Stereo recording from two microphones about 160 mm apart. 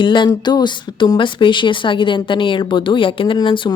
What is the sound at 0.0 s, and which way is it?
Speech, 30° left (ahead or behind).